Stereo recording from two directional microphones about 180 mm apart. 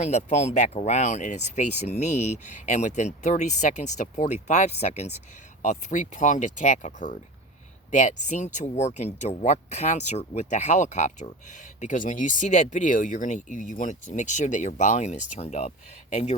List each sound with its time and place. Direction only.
0.0 s speech: 40° left (ahead or behind)